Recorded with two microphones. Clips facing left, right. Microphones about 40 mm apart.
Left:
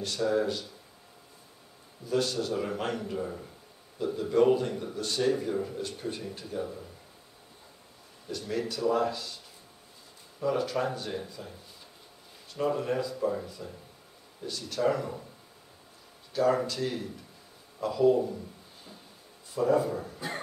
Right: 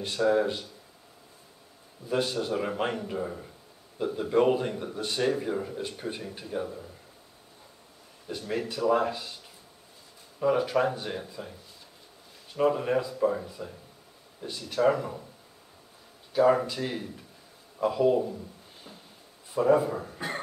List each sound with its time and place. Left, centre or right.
0.0 s speech: right
2.0 s a man's voice: right; by 6.9 s centre
8.3 s speech: right
10.4 s speech: right
12.5 s speech: right
16.3 s speech: centre
19.5 s speech: right